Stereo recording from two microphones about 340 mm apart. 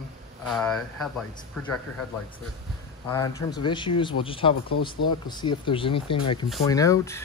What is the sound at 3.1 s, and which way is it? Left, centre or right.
Speech, centre.